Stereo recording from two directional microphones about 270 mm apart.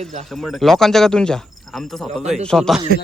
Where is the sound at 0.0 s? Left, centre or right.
Right.